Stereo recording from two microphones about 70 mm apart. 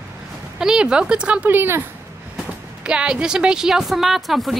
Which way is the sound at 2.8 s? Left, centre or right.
Centre.